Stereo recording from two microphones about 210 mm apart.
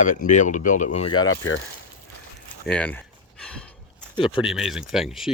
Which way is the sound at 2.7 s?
5° left (ahead or behind).